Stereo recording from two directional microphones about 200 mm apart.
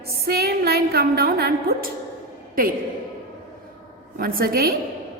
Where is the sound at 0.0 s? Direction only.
50° right (ahead or behind).